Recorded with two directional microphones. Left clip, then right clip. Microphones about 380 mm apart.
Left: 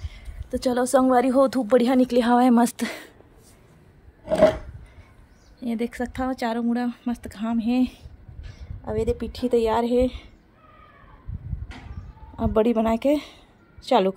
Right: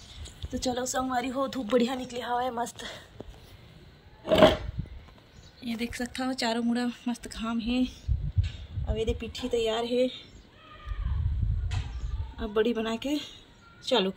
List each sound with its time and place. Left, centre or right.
0.5 s speech: centre
2.4 s a sound: left
5.6 s speech: centre
9.0 s speech: centre
12.4 s speech: centre